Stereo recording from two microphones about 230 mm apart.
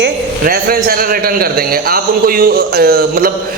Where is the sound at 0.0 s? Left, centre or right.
Right.